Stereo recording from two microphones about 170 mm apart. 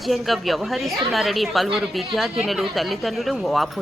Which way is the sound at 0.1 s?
Centre (ahead or behind).